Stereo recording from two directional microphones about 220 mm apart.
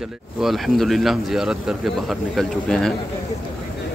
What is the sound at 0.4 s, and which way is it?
A man's voice, centre (ahead or behind).